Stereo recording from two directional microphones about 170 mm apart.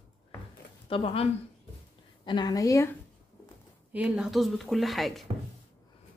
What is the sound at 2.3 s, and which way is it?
Speech, 25° left (ahead or behind).